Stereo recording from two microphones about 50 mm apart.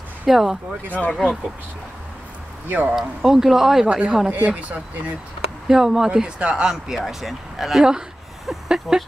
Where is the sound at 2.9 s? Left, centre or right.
Centre.